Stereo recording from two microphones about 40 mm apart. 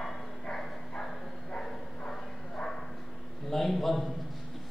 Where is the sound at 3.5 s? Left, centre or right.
Centre.